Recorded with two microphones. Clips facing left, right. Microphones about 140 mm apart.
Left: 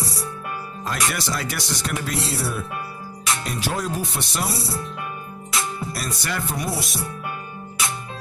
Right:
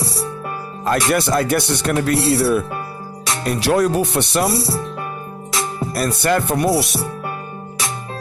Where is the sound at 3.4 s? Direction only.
70° right (ahead or behind).